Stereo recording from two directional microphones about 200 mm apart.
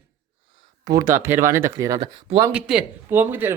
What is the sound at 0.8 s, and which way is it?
Speech, 15° right (ahead or behind).